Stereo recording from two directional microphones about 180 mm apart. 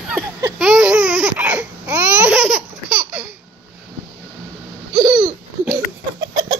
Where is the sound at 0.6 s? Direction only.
5° right (ahead or behind).